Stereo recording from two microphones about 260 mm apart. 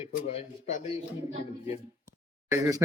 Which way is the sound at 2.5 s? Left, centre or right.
Centre.